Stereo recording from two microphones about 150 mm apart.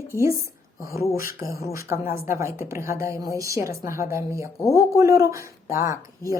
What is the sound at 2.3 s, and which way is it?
Speech, 20° right (ahead or behind).